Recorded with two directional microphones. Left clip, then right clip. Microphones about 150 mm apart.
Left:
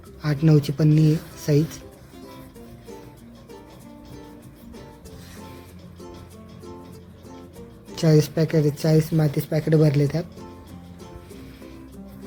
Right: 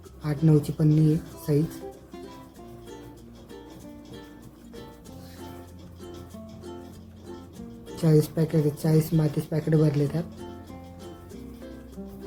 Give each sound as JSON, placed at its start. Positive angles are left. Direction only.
{"t": 0.2, "sound": "speech", "side_deg": 25}
{"t": 7.9, "sound": "speech", "side_deg": 25}